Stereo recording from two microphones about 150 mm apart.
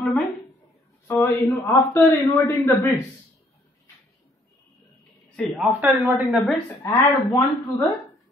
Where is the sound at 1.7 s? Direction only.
20° left (ahead or behind).